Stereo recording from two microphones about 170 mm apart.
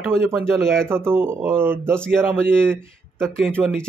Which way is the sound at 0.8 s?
15° right (ahead or behind).